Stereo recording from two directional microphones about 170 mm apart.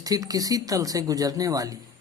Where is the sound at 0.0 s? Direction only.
20° right (ahead or behind).